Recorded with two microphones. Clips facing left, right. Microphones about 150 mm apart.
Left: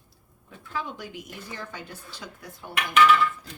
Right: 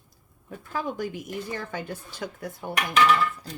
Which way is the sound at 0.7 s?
45° right (ahead or behind).